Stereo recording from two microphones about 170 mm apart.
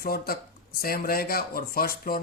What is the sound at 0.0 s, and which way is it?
Speech, 60° left (ahead or behind).